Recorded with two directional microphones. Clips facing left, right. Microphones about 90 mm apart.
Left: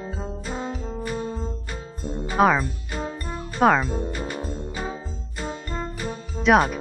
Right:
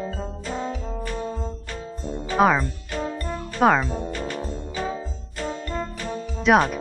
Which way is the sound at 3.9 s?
5° left (ahead or behind).